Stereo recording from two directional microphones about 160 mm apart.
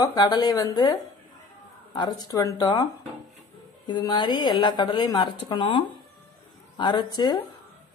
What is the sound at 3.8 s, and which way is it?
A woman's voice, 30° left (ahead or behind).